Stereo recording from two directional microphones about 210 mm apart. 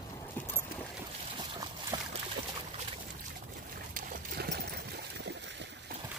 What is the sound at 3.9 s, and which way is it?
Trickle, 45° right (ahead or behind).